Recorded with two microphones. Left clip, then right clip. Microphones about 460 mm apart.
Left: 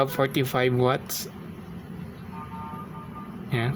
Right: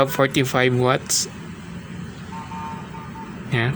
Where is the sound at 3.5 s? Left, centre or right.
Left.